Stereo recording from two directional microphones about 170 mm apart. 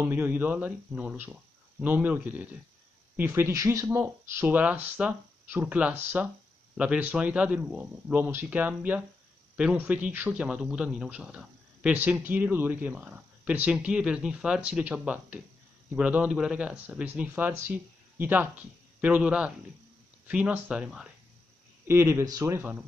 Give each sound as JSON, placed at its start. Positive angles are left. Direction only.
{"t": 0.0, "sound": "a man's voice", "side_deg": -10}